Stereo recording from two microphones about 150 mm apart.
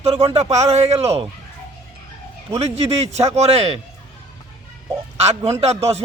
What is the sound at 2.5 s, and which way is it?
A man's voice, 45° right (ahead or behind).